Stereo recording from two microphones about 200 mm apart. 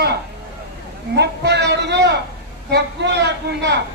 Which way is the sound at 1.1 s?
55° right (ahead or behind).